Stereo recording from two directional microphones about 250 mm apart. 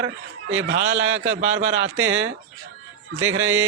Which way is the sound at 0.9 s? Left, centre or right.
Centre.